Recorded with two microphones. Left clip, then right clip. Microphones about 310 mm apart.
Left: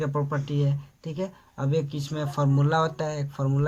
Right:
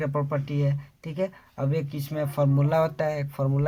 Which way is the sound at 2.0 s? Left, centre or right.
Right.